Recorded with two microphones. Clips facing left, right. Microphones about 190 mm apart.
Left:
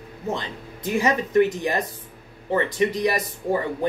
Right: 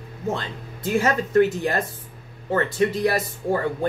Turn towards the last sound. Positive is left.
turn(degrees=15)  # may be behind; listen again after turning